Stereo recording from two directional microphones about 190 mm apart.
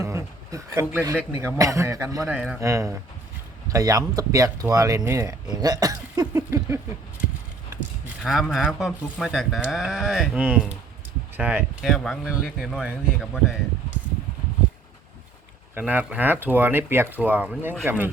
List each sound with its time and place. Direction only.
0.0 s speech: 15° right (ahead or behind)
8.2 s speech: centre (ahead or behind)
15.7 s speech: 10° right (ahead or behind)